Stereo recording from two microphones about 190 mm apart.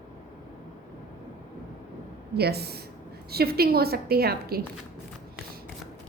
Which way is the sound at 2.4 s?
55° right (ahead or behind).